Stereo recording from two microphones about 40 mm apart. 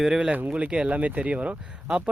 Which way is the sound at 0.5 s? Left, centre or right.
Right.